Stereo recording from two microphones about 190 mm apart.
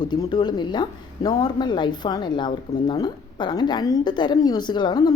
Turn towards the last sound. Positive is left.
turn(degrees=20)  # may be behind; listen again after turning